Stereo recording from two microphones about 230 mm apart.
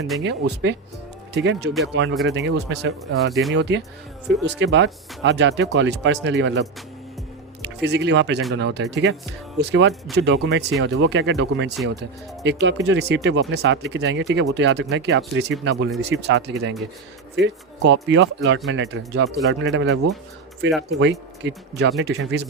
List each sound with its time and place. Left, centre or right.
0.2 s speech: right
10.2 s speech: right